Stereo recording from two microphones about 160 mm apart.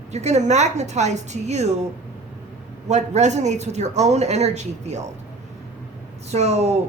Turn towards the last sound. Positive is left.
turn(degrees=-40)  # may be behind; listen again after turning